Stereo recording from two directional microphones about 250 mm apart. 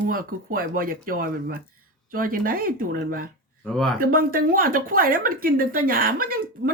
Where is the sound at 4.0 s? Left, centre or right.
Right.